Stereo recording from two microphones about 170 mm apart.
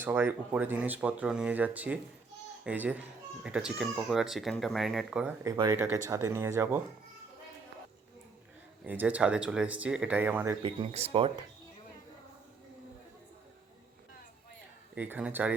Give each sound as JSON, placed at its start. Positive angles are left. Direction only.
{"t": 0.0, "sound": "speech", "side_deg": -10}
{"t": 5.5, "sound": "speech", "side_deg": -25}
{"t": 5.7, "sound": "speech", "side_deg": -15}
{"t": 8.8, "sound": "speech", "side_deg": -10}
{"t": 10.6, "sound": "speech", "side_deg": -35}
{"t": 14.9, "sound": "speech", "side_deg": -10}